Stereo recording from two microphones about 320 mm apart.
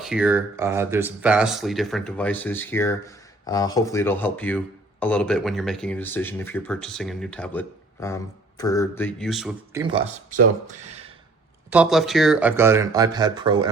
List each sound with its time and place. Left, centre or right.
0.0 s speech: centre
9.8 s speech: centre
11.7 s speech: centre